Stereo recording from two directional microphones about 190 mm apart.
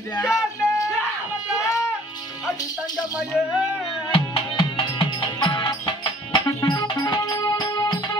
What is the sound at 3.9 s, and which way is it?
Music, 30° left (ahead or behind).